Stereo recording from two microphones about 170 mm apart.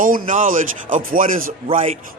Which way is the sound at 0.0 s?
55° right (ahead or behind).